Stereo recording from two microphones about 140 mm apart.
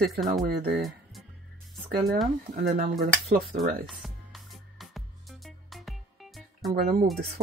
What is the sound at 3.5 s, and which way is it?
Speech, 65° right (ahead or behind).